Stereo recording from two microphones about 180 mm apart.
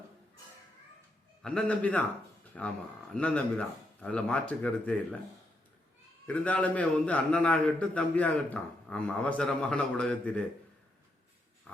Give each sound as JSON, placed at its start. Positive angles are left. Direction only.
{"t": 1.4, "sound": "a man's voice", "side_deg": 5}
{"t": 6.2, "sound": "a man's voice", "side_deg": 10}